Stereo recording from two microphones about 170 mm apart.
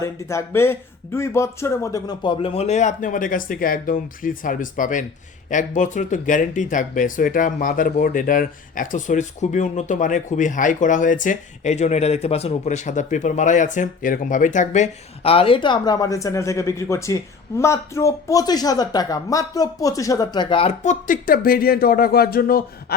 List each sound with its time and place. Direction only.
0.0 s speech: 15° left (ahead or behind); by 20.7 s 30° left (ahead or behind)
20.8 s speech: 50° left (ahead or behind)